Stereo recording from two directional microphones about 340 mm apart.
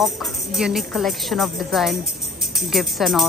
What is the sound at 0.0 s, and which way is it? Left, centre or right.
A woman's voice, centre.